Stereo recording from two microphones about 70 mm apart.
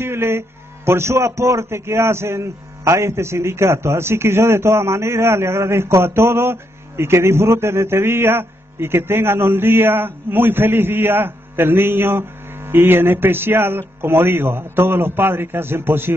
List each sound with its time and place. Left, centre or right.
0.0 s a man's voice: right